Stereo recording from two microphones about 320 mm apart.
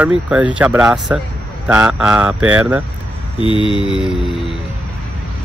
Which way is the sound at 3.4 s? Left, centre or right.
Centre.